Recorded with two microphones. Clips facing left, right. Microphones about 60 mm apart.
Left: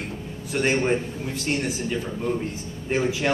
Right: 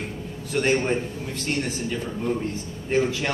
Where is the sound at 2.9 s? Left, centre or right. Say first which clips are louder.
Even; centre.